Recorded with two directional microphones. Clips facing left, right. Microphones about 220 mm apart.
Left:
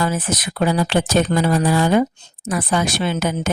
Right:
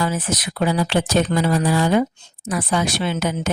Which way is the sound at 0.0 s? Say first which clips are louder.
Left 1 dB; 50° left (ahead or behind).